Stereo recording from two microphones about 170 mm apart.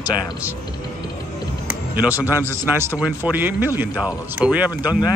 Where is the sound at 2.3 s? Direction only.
15° right (ahead or behind).